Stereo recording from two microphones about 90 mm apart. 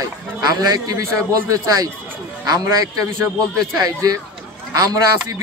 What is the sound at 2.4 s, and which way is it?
A man's voice, 45° right (ahead or behind).